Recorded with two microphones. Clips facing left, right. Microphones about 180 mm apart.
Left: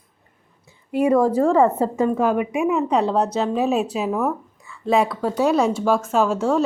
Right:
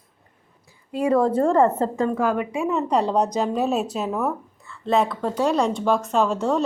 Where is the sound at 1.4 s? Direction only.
5° left (ahead or behind).